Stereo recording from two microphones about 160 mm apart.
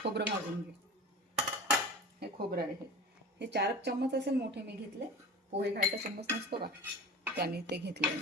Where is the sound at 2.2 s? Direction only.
75° right (ahead or behind).